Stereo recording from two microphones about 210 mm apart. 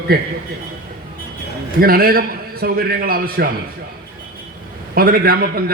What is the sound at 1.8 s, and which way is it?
A man's voice, 45° right (ahead or behind).